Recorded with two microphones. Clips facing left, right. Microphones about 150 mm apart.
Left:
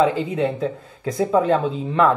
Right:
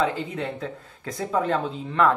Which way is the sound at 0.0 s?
15° left (ahead or behind).